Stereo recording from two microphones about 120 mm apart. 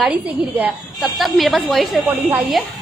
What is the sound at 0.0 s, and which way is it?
Speech, 10° right (ahead or behind).